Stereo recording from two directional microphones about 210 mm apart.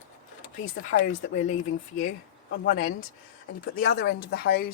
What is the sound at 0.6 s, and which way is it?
Speech, 70° left (ahead or behind).